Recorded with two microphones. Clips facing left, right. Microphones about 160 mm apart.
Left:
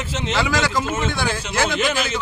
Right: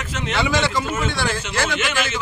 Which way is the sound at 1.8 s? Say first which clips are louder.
Left 2 dB; 35° left (ahead or behind).